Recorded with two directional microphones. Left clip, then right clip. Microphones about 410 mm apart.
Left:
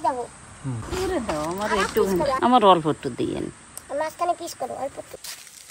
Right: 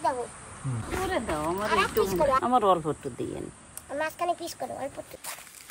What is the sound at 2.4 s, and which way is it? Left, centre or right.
Speech, centre.